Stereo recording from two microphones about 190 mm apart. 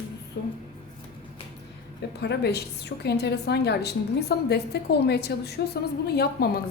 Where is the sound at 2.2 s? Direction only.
60° left (ahead or behind).